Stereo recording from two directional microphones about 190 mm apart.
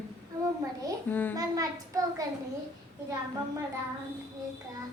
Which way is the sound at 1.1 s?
10° left (ahead or behind).